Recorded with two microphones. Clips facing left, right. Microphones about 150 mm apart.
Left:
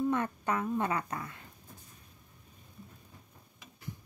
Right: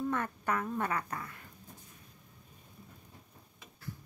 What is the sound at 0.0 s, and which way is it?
A woman's voice, 20° left (ahead or behind).